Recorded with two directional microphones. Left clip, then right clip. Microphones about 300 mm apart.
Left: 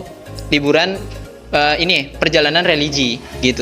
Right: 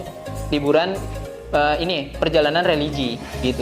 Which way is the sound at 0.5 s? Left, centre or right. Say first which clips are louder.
Left 4 dB; left.